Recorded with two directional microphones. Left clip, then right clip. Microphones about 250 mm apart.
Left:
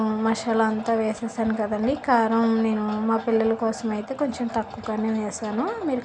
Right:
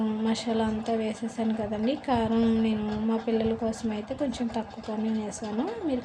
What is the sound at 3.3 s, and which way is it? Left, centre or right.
Speech, left.